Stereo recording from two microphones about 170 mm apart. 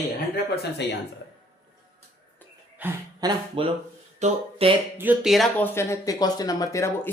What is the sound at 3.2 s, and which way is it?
Speech, 30° right (ahead or behind).